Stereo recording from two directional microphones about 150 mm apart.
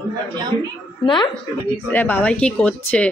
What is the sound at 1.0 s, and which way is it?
Speech, 30° left (ahead or behind).